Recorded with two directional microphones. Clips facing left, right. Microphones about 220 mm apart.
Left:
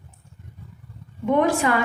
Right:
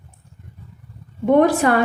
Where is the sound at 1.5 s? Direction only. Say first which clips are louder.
Right 3 dB; 40° right (ahead or behind).